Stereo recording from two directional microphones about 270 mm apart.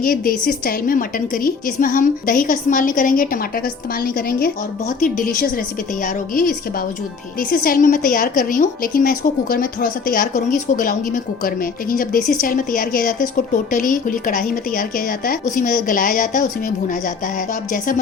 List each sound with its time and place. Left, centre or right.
0.0 s a woman's voice: left